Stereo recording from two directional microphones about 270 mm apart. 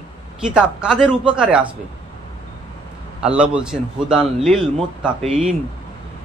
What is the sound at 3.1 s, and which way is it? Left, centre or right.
A man's voice, centre.